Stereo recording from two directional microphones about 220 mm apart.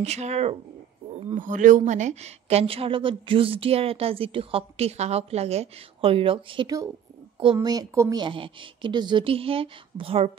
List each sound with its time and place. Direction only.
0.0 s a woman's voice: 30° right (ahead or behind)